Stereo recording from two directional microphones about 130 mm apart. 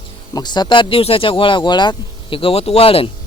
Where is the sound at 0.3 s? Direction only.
35° left (ahead or behind).